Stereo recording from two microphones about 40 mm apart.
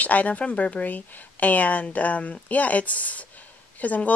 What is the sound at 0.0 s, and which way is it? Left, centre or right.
Speech, left.